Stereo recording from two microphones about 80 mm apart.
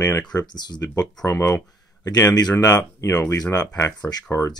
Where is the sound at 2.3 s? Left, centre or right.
Left.